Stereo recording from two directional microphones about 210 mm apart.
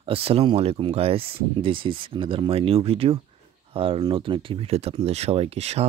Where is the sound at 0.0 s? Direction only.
25° right (ahead or behind).